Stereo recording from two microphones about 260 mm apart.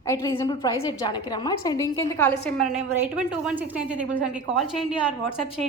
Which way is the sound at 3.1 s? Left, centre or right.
Centre.